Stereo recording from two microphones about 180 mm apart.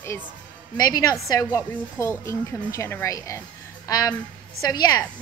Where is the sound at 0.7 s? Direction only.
20° left (ahead or behind).